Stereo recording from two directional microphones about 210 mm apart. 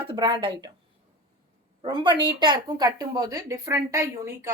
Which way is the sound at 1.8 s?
20° right (ahead or behind).